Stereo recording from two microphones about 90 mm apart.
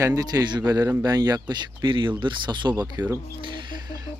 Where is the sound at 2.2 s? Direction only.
60° right (ahead or behind).